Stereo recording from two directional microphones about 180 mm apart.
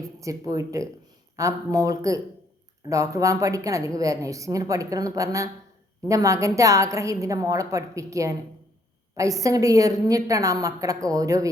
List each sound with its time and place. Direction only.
0.2 s a woman's voice: 20° right (ahead or behind)